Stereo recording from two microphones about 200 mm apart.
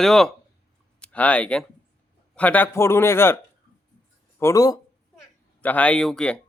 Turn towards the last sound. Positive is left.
turn(degrees=5)  # may be behind; listen again after turning